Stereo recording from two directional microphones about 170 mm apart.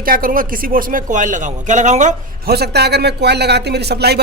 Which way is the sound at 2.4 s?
70° right (ahead or behind).